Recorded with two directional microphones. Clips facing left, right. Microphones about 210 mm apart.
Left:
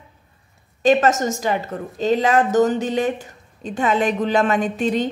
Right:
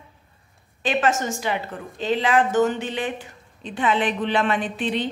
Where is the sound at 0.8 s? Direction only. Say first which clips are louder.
Left 6 dB; 40° left (ahead or behind).